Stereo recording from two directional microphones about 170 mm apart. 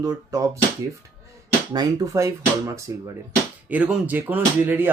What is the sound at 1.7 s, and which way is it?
Speech, 20° right (ahead or behind).